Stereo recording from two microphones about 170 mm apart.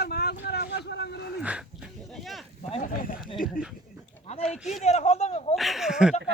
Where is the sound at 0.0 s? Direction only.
70° left (ahead or behind).